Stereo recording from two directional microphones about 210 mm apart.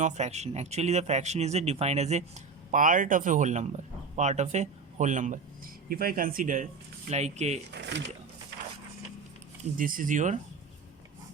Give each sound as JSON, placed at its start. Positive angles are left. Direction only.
{"t": 0.0, "sound": "speech", "side_deg": -30}
{"t": 7.7, "sound": "speech", "side_deg": -55}
{"t": 9.7, "sound": "speech", "side_deg": -40}